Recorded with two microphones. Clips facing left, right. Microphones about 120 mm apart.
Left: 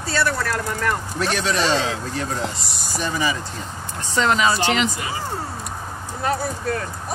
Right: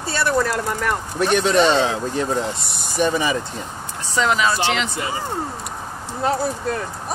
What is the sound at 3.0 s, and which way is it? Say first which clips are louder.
Speech: right 4 dB; 20° right (ahead or behind).